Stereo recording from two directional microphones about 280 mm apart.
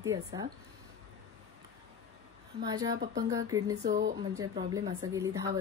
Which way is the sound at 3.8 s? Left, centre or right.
Right.